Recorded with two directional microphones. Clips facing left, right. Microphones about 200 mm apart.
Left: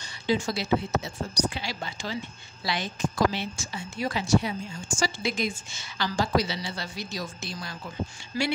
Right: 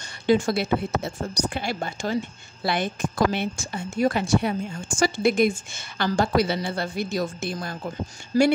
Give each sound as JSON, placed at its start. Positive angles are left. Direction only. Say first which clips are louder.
{"t": 0.0, "sound": "a woman's voice", "louder": "right 6 dB", "side_deg": -55}